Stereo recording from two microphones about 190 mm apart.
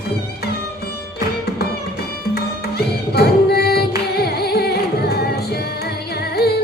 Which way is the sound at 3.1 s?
55° left (ahead or behind).